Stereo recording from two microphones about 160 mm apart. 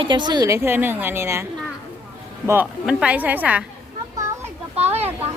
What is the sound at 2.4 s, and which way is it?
A woman's voice, 10° right (ahead or behind).